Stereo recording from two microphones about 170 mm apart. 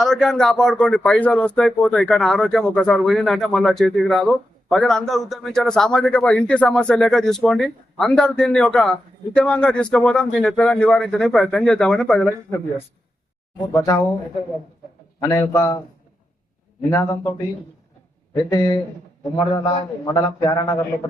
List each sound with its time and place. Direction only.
0.0 s speech: 5° left (ahead or behind)
13.7 s speech: 15° left (ahead or behind)
15.2 s speech: 15° left (ahead or behind)
16.9 s speech: 15° left (ahead or behind)
18.5 s speech: 25° left (ahead or behind)